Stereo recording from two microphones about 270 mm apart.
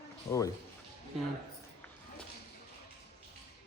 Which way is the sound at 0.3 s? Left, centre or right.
Centre.